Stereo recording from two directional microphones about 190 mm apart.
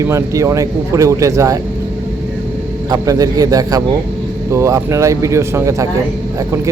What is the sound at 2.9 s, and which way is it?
A man's voice, 20° right (ahead or behind).